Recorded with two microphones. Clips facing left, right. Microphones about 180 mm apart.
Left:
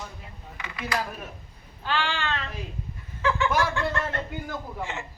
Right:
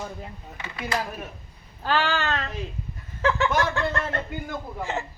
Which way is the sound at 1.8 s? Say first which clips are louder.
Right 4 dB; 40° right (ahead or behind).